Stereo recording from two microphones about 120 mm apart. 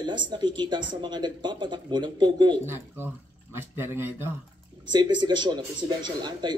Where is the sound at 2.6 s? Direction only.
20° right (ahead or behind).